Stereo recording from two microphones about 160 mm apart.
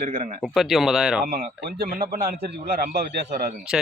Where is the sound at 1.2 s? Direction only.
70° right (ahead or behind).